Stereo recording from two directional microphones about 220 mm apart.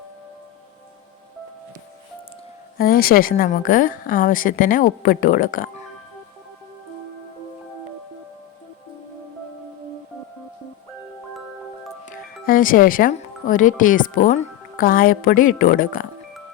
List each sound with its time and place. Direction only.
2.7 s a woman's voice: 40° left (ahead or behind)
12.0 s speech: 40° left (ahead or behind)